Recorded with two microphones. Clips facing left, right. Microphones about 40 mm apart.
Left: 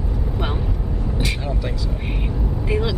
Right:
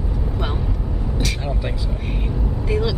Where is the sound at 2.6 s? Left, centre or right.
Centre.